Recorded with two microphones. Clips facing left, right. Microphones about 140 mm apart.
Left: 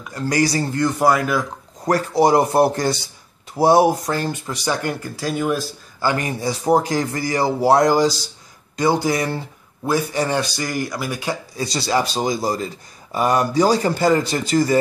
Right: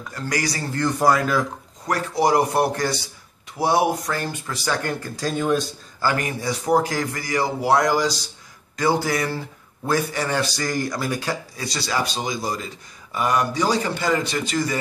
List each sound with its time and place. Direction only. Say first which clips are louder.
0.1 s speech: left 7 dB; 25° left (ahead or behind)
0.7 s speech: left 1 dB; 10° left (ahead or behind)
1.9 s speech: left 4 dB; 35° left (ahead or behind); by 6.0 s 5° left (ahead or behind)
6.0 s speech: left 2 dB; 25° left (ahead or behind)
8.7 s speech: left 3 dB; 20° left (ahead or behind)
11.2 s a man's voice: left 3 dB; 25° left (ahead or behind)